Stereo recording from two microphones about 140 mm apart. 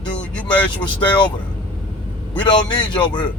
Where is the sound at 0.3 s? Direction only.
35° left (ahead or behind).